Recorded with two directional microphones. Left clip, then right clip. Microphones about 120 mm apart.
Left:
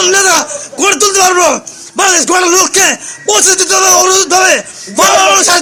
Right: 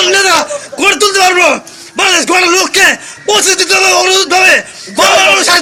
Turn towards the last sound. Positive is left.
turn(degrees=50)  # may be behind; listen again after turning